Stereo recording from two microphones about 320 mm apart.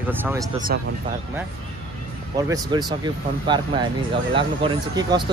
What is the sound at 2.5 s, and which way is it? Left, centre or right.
Speech, centre.